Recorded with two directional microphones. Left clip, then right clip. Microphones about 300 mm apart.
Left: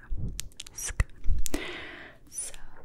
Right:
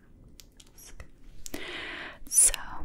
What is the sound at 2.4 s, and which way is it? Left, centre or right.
Whispering, right.